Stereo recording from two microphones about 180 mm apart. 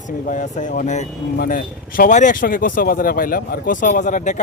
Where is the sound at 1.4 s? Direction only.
50° left (ahead or behind).